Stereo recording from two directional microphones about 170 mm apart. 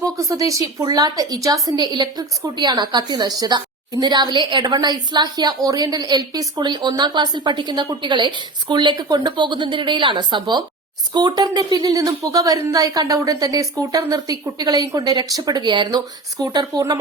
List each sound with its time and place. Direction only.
0.2 s a woman's voice: 20° right (ahead or behind)